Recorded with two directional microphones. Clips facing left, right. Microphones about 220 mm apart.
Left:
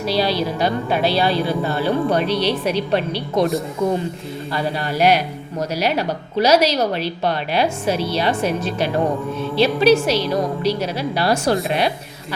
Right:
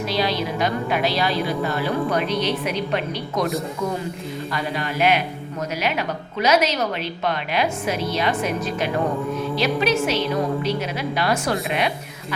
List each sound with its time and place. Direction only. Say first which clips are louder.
0.0 s speech: left 3 dB; 35° left (ahead or behind)
4.5 s speech: left 4 dB; 35° left (ahead or behind)